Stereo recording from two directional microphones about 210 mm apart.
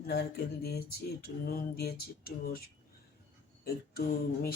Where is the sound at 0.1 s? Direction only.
50° left (ahead or behind).